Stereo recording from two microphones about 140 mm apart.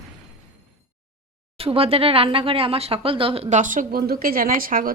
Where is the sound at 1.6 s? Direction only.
45° right (ahead or behind).